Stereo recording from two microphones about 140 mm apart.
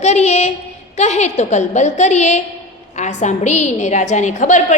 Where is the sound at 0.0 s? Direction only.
50° left (ahead or behind).